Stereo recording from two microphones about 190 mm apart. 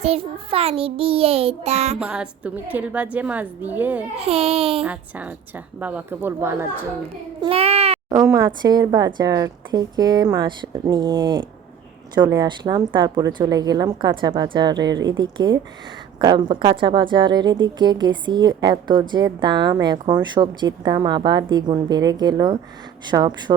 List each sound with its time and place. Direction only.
0.0 s child singing: 30° right (ahead or behind)
2.0 s a woman's voice: 5° right (ahead or behind)
4.3 s child singing: 30° right (ahead or behind)
4.8 s a woman's voice: 10° right (ahead or behind)
7.4 s a child's voice: 30° right (ahead or behind)
8.1 s a woman's voice: 15° right (ahead or behind)
14.8 s a woman's voice: 70° right (ahead or behind)
15.0 s a woman's voice: 25° right (ahead or behind)